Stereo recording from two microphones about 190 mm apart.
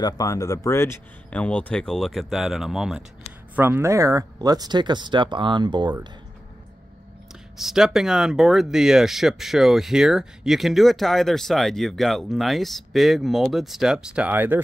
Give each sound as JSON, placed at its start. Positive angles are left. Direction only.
{"t": 0.0, "sound": "speech", "side_deg": 20}
{"t": 7.5, "sound": "speech", "side_deg": 0}